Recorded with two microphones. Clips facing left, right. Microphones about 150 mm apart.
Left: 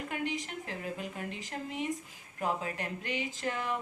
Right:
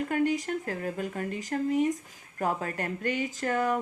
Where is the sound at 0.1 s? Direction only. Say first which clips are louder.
Right 9 dB; 45° right (ahead or behind).